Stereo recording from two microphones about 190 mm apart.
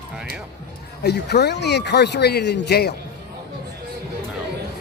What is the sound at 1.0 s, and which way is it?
Speech, 60° left (ahead or behind).